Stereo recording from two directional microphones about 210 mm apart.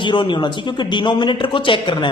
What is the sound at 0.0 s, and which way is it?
A man's voice, 25° left (ahead or behind).